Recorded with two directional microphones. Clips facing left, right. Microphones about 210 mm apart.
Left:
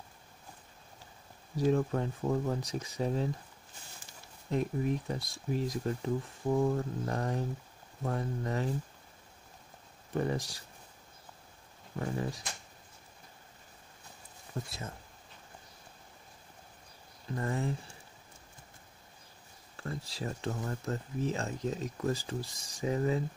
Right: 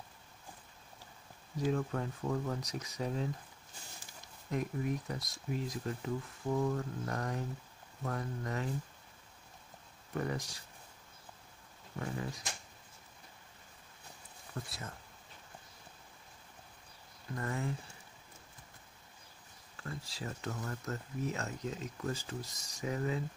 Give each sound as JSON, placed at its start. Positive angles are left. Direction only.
{"t": 1.7, "sound": "speech", "side_deg": 35}
{"t": 4.5, "sound": "speech", "side_deg": 30}
{"t": 10.1, "sound": "speech", "side_deg": 30}
{"t": 14.5, "sound": "speech", "side_deg": 25}
{"t": 17.3, "sound": "speech", "side_deg": 30}
{"t": 19.8, "sound": "speech", "side_deg": 35}